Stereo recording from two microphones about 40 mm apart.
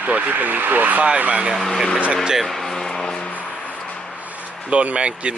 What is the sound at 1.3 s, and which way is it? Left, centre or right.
Speech, right.